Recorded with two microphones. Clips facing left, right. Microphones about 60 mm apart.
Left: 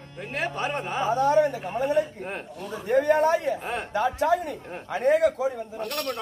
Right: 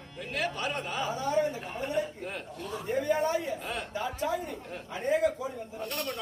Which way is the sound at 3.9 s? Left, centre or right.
Left.